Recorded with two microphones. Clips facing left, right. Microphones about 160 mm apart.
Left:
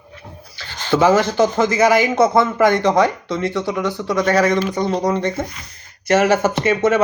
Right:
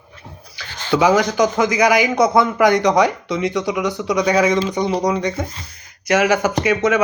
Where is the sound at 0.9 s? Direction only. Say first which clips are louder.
Left 1 dB; 10° right (ahead or behind).